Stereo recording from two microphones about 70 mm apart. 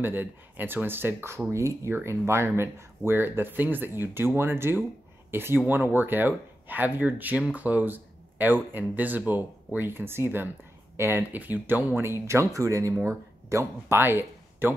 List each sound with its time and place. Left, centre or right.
0.0 s speech: right